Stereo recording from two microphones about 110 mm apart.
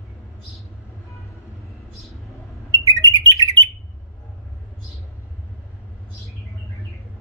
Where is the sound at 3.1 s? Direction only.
35° right (ahead or behind).